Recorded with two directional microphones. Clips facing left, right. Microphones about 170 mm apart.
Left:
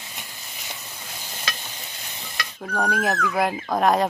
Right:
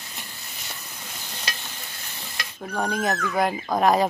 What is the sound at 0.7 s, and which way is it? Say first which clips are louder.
Stir: left 2 dB; 10° left (ahead or behind).